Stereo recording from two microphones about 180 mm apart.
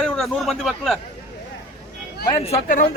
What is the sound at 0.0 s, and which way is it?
Speech, centre (ahead or behind).